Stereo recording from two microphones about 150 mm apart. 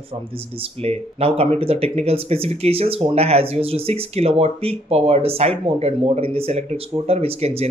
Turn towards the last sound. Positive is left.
turn(degrees=-45)  # may be behind; listen again after turning